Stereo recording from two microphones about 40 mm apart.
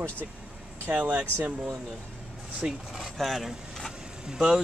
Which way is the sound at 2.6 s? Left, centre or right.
Right.